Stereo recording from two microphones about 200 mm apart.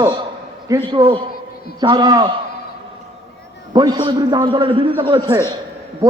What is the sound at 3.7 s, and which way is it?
A man's voice, 20° right (ahead or behind).